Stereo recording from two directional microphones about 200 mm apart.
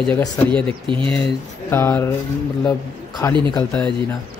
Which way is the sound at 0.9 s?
25° right (ahead or behind).